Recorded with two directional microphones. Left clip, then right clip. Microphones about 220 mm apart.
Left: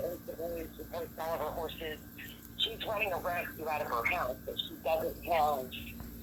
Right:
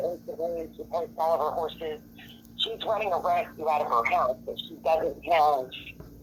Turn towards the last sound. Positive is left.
turn(degrees=-30)  # may be behind; listen again after turning